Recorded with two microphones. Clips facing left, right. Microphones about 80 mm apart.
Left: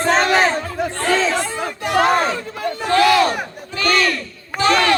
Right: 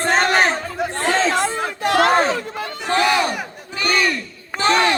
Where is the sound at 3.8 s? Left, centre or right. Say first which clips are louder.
Left 2 dB; centre.